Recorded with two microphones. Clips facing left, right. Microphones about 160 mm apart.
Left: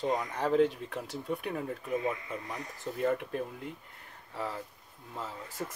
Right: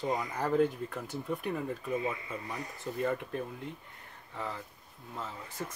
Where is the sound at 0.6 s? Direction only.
85° left.